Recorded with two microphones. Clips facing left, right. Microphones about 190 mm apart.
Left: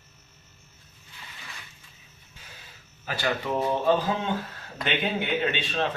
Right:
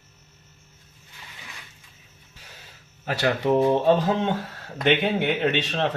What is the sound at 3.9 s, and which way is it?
Speech, 65° right (ahead or behind).